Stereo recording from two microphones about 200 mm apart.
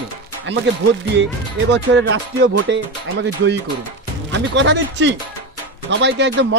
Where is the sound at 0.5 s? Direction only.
60° right (ahead or behind).